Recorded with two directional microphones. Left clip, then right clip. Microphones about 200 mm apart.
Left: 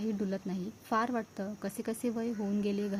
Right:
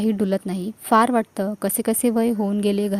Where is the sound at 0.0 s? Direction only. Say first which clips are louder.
Right 14 dB; 45° right (ahead or behind).